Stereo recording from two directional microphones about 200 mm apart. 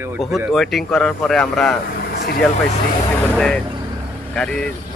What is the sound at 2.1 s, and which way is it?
Speech, 50° left (ahead or behind).